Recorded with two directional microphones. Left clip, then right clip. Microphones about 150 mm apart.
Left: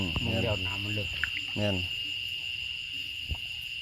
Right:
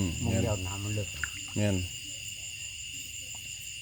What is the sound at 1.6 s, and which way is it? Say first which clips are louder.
Speech: even; 25° right (ahead or behind).